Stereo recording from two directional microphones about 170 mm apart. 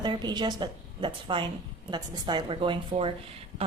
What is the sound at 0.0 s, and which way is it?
A woman's voice, 25° right (ahead or behind).